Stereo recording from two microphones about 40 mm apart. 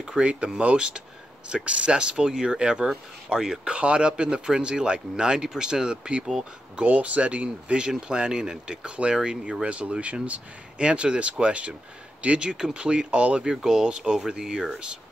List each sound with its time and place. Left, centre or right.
0.2 s speech: right
0.7 s speech: centre
6.8 s speech: right
8.1 s speech: centre
9.7 s speech: right
13.4 s speech: centre